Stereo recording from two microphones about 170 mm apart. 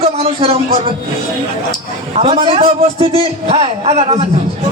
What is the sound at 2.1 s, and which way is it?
A man's voice, 40° right (ahead or behind).